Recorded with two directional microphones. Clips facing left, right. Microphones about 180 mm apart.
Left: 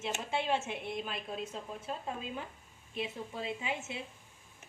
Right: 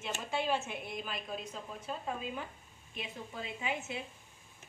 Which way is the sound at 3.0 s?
25° left (ahead or behind).